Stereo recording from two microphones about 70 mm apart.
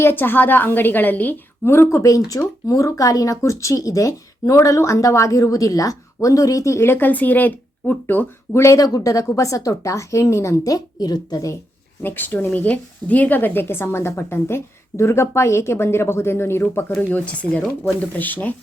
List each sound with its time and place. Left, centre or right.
0.0 s a woman's voice: left
1.6 s a woman's voice: left
8.6 s speech: left
10.6 s a woman's voice: left
12.0 s a woman's voice: left
17.1 s a woman's voice: left